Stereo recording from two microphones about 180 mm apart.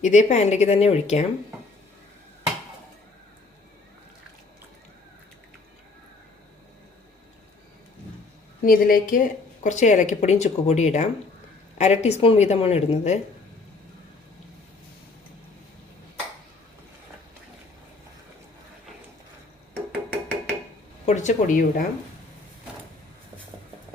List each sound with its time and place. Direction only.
0.0 s speech: 40° left (ahead or behind)
8.6 s speech: 55° left (ahead or behind)
9.6 s speech: 40° left (ahead or behind)
21.1 s speech: 40° left (ahead or behind)